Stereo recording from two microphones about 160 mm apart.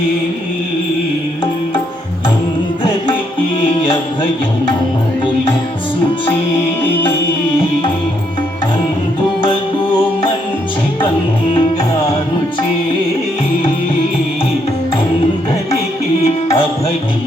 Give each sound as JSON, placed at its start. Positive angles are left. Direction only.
{"t": 3.6, "sound": "music", "side_deg": 35}
{"t": 16.2, "sound": "music", "side_deg": 40}